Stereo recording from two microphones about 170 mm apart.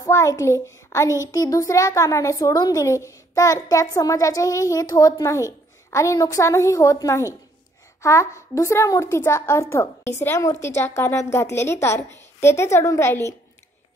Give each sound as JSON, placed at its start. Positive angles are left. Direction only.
{"t": 0.0, "sound": "a child's voice", "side_deg": 20}